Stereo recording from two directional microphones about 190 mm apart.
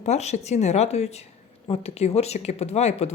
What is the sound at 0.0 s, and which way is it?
A woman's voice, 35° left (ahead or behind).